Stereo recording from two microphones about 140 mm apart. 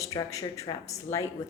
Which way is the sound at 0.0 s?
25° left (ahead or behind).